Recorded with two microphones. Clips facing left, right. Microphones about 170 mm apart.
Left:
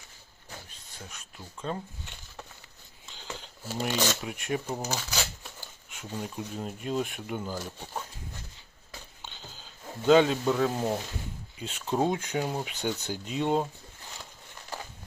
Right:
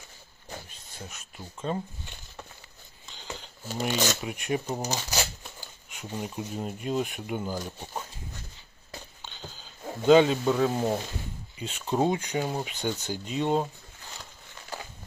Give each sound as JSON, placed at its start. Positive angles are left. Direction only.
{"t": 0.9, "sound": "speech", "side_deg": -5}
{"t": 3.1, "sound": "speech", "side_deg": 5}
{"t": 4.8, "sound": "speech", "side_deg": -15}
{"t": 5.9, "sound": "speech", "side_deg": -5}
{"t": 10.1, "sound": "speech", "side_deg": 0}